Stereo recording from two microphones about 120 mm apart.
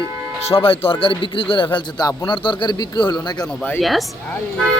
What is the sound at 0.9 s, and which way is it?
Speech, 50° left (ahead or behind).